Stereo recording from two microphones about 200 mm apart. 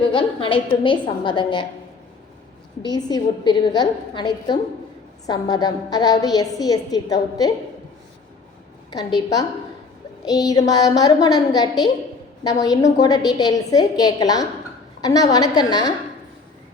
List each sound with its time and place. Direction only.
0.1 s a woman's voice: 25° left (ahead or behind)
2.8 s a woman's voice: 20° left (ahead or behind)
8.9 s a woman's voice: 20° left (ahead or behind)